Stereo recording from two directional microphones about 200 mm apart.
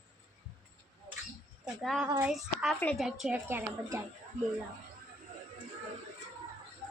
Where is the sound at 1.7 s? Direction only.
5° right (ahead or behind).